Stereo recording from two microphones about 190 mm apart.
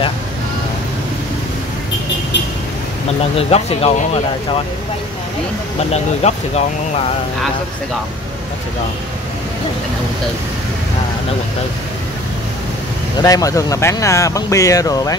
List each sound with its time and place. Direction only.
3.3 s speech: 30° left (ahead or behind)
5.9 s speech: 35° left (ahead or behind)
13.2 s speech: 20° left (ahead or behind)